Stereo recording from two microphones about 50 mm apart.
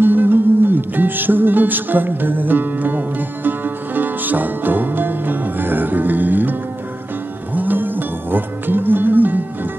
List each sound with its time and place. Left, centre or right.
0.0 s music: right
7.5 s music: right